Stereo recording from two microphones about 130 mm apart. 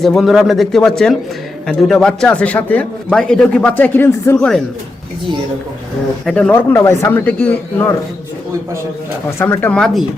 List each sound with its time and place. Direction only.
0.0 s a man's voice: centre (ahead or behind)
6.2 s a man's voice: 5° left (ahead or behind)
6.7 s a man's voice: 20° left (ahead or behind)
9.4 s a man's voice: 15° left (ahead or behind)